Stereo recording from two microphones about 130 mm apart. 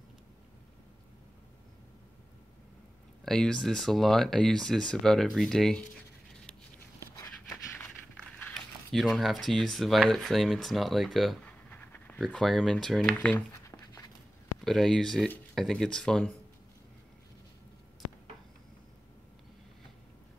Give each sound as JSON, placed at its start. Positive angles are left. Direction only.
{"t": 3.3, "sound": "speech", "side_deg": 5}
{"t": 8.5, "sound": "speech", "side_deg": 0}
{"t": 11.7, "sound": "pant", "side_deg": 15}
{"t": 12.2, "sound": "speech", "side_deg": 0}
{"t": 13.5, "sound": "a sound", "side_deg": 25}
{"t": 14.6, "sound": "speech", "side_deg": 0}